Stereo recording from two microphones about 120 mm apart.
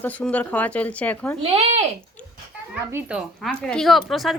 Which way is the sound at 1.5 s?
55° right (ahead or behind).